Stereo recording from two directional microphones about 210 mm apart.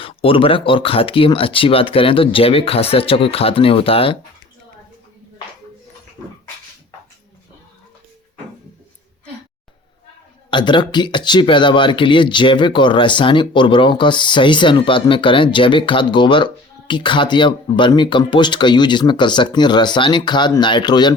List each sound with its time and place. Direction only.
0.0 s speech: 25° left (ahead or behind)
10.5 s speech: 20° left (ahead or behind)